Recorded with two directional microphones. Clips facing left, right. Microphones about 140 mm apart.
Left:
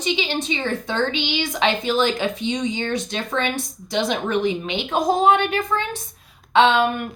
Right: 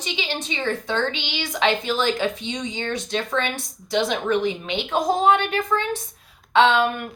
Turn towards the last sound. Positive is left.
turn(degrees=20)  # may be behind; listen again after turning